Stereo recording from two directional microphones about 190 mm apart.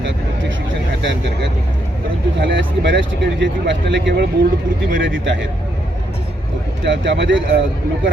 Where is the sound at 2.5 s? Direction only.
70° right (ahead or behind).